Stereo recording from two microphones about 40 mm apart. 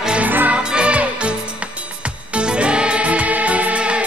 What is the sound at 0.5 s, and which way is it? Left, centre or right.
Music, right.